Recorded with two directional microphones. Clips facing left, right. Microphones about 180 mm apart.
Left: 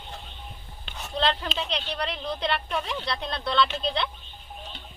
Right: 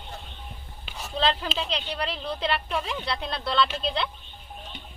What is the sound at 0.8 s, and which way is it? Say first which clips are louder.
A woman's voice: even; 5° right (ahead or behind).